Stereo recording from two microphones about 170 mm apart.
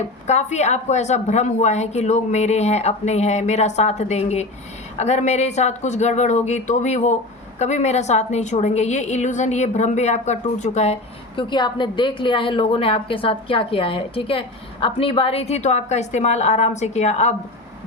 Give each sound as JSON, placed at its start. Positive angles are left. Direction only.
{"t": 0.3, "sound": "a woman's voice", "side_deg": 40}
{"t": 11.3, "sound": "a woman's voice", "side_deg": 25}